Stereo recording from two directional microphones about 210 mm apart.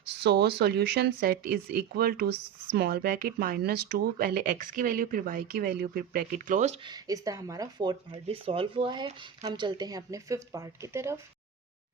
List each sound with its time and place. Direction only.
0.1 s speech: 55° right (ahead or behind); by 6.7 s 35° right (ahead or behind)
6.8 s speech: 20° right (ahead or behind)